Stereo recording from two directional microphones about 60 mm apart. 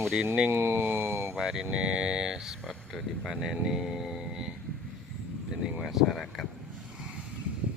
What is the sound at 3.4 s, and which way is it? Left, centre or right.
Speech, centre.